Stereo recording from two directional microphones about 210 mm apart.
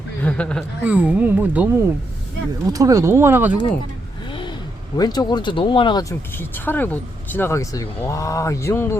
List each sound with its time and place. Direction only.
0.2 s a sound: 5° left (ahead or behind)
0.9 s speech: 5° right (ahead or behind)
4.3 s gasp: 25° left (ahead or behind)
4.9 s speech: 20° left (ahead or behind)